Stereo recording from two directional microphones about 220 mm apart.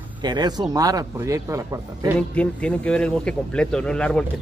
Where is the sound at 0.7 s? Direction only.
15° right (ahead or behind).